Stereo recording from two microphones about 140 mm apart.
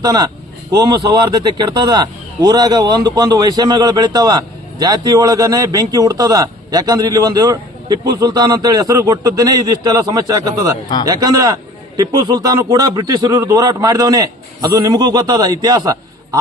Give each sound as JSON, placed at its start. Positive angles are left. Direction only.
{"t": 0.0, "sound": "speech", "side_deg": -30}